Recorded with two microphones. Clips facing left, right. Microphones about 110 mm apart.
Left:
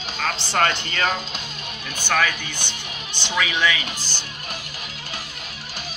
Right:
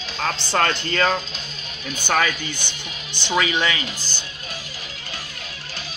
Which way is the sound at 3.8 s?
80° left.